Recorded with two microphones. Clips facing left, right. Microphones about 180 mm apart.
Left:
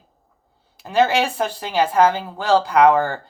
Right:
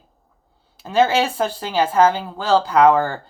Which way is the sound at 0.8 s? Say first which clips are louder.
Right 1 dB; 15° left (ahead or behind).